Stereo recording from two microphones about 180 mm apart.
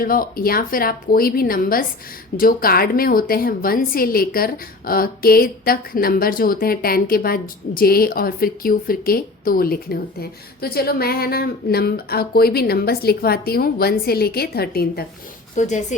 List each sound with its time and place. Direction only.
0.0 s a woman's voice: 55° left (ahead or behind)
15.5 s a woman's voice: 40° left (ahead or behind)